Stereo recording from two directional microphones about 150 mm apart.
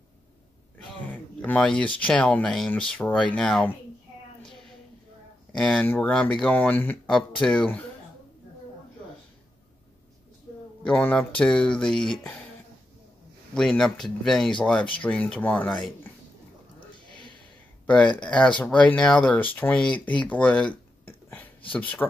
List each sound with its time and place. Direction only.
1.1 s a sound: 10° left (ahead or behind)
2.0 s speech: 10° left (ahead or behind)
5.5 s speech: 5° left (ahead or behind)
10.9 s speech: 10° left (ahead or behind)
13.6 s speech: 5° left (ahead or behind)
16.9 s a sound: 30° left (ahead or behind)
17.8 s speech: 10° left (ahead or behind)
21.7 s speech: 10° left (ahead or behind)